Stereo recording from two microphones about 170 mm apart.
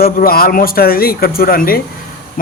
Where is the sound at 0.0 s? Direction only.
60° left (ahead or behind).